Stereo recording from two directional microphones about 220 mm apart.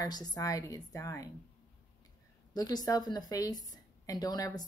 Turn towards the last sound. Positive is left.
turn(degrees=15)  # may be behind; listen again after turning